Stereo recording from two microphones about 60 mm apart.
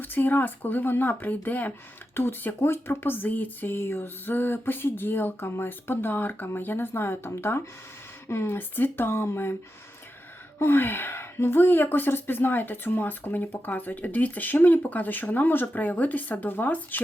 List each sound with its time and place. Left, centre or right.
0.0 s speech: left
2.6 s speech: left
10.6 s speech: left